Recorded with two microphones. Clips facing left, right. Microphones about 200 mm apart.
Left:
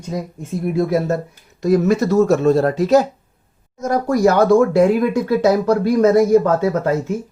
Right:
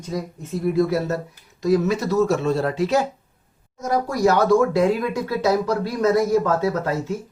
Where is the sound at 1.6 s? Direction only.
50° left (ahead or behind).